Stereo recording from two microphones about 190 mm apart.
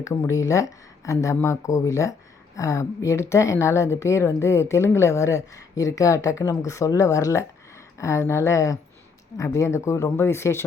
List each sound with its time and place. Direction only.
0.0 s speech: 15° left (ahead or behind)